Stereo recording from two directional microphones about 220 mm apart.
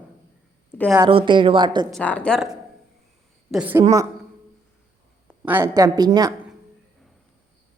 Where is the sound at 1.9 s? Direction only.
5° left (ahead or behind).